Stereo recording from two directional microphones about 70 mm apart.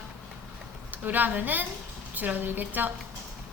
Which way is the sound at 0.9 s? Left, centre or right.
Right.